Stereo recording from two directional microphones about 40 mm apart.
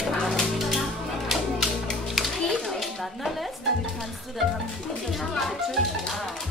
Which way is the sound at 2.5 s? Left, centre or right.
Centre.